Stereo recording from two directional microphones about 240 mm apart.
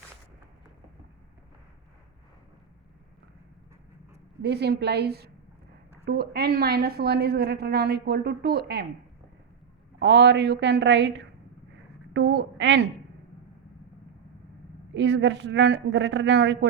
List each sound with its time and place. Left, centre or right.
4.4 s a woman's voice: right
10.0 s a woman's voice: right
14.9 s a woman's voice: right